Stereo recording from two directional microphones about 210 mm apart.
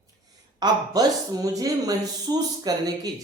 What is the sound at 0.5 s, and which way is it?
Speech, 20° right (ahead or behind).